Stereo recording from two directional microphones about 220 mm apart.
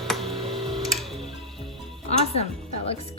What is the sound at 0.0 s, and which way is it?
Tick-tock, centre (ahead or behind).